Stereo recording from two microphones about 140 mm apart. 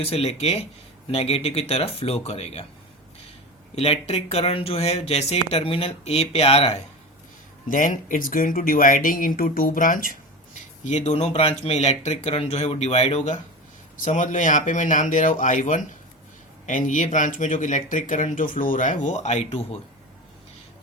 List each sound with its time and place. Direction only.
0.0 s speech: 45° left (ahead or behind)
3.8 s speech: 50° left (ahead or behind)
7.7 s speech: 70° left (ahead or behind)
10.8 s speech: 55° left (ahead or behind)
13.9 s speech: 65° left (ahead or behind)